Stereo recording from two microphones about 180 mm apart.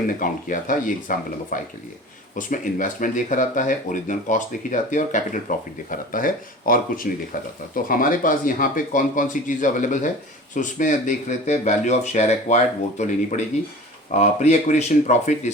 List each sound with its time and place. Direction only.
0.2 s speech: 50° left (ahead or behind)